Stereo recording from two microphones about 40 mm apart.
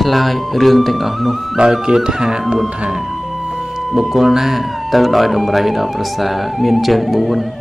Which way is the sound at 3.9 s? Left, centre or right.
Centre.